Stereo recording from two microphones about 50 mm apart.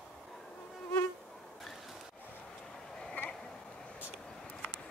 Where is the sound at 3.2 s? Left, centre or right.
Left.